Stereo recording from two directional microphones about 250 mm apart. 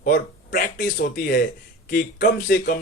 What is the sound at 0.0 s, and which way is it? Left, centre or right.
A man's voice, left.